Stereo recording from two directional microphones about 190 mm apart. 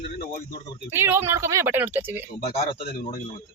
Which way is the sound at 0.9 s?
10° right (ahead or behind).